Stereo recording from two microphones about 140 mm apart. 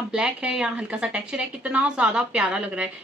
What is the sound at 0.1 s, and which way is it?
A woman's voice, 5° right (ahead or behind).